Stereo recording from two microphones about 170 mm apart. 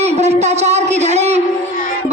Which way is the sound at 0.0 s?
40° right (ahead or behind).